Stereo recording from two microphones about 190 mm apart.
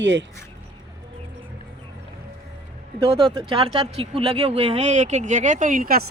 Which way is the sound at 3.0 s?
30° right (ahead or behind).